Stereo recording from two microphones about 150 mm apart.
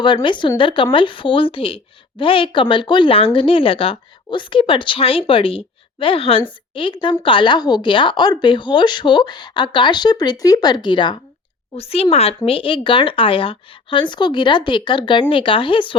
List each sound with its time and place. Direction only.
0.0 s a woman's voice: 30° left (ahead or behind)
11.7 s a woman's voice: 40° left (ahead or behind)